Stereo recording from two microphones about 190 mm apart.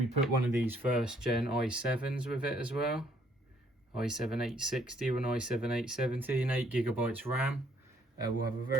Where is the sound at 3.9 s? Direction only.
5° right (ahead or behind).